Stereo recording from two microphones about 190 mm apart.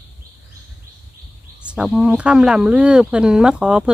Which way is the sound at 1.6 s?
5° right (ahead or behind).